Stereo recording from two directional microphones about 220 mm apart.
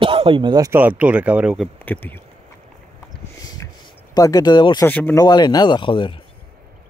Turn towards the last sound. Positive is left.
turn(degrees=25)  # may be behind; listen again after turning